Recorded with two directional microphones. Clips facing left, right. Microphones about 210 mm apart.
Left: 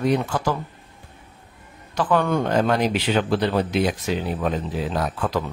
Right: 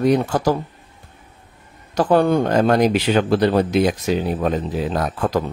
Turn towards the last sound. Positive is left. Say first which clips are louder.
# right 4 dB
turn(degrees=-45)  # may be behind; listen again after turning